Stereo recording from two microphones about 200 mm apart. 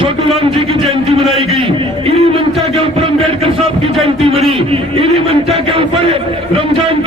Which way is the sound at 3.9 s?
Centre (ahead or behind).